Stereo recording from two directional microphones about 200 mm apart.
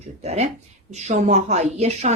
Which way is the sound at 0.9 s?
35° right (ahead or behind).